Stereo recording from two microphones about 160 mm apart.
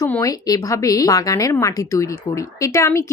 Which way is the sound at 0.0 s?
20° left (ahead or behind).